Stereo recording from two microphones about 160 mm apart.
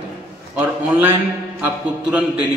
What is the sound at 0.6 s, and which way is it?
A man's voice, 10° right (ahead or behind).